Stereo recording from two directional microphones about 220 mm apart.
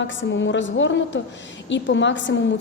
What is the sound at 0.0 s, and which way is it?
A woman's voice, 55° left (ahead or behind).